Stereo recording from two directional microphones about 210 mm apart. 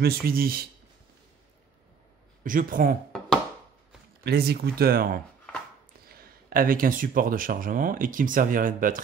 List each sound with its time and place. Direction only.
0.0 s speech: 45° right (ahead or behind)
2.4 s speech: 40° right (ahead or behind)
4.2 s speech: 50° right (ahead or behind)